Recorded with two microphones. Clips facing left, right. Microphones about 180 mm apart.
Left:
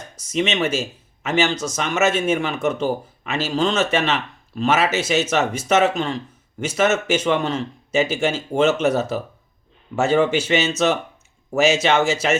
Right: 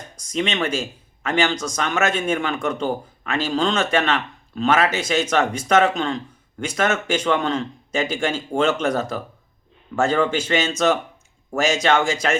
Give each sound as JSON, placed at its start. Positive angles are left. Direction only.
{"t": 0.2, "sound": "speech", "side_deg": 5}